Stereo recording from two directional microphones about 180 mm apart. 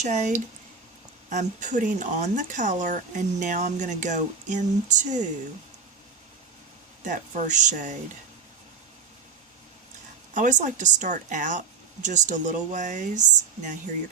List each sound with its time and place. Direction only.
0.0 s speech: 40° right (ahead or behind)
7.0 s speech: 40° right (ahead or behind)
10.3 s speech: 45° right (ahead or behind)